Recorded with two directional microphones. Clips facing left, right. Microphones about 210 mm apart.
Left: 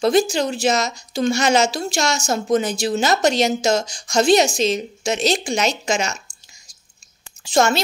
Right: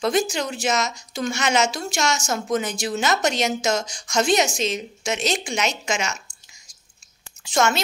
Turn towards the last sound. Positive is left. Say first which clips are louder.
# left 4 dB
turn(degrees=35)  # may be behind; listen again after turning